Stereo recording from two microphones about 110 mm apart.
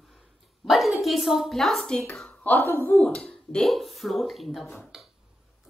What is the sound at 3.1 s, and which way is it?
A woman's voice, 10° left (ahead or behind).